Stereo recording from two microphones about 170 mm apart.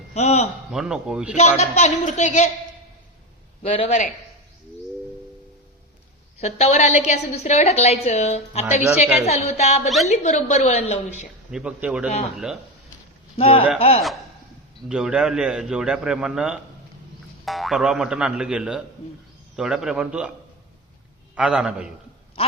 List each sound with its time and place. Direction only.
0.1 s a man's voice: 40° left (ahead or behind)
0.7 s a man's voice: 5° right (ahead or behind)
1.4 s a woman's voice: 45° left (ahead or behind)
3.6 s a woman's voice: 35° left (ahead or behind)
6.4 s a woman's voice: 40° left (ahead or behind)
11.5 s a man's voice: 5° right (ahead or behind)
13.3 s a woman's voice: 35° left (ahead or behind)
14.8 s a man's voice: 5° right (ahead or behind)
21.3 s a man's voice: 5° right (ahead or behind)
22.4 s a sound: 35° left (ahead or behind)